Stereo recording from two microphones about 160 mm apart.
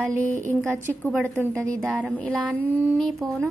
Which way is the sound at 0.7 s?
15° right (ahead or behind).